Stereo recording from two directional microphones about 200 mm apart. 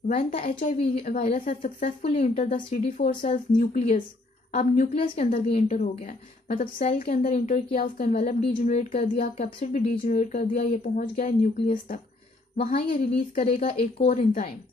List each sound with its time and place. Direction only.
0.3 s speech: 35° left (ahead or behind)
4.6 s a woman's voice: 30° left (ahead or behind)
12.7 s a woman's voice: 50° left (ahead or behind)
13.6 s speech: 30° left (ahead or behind)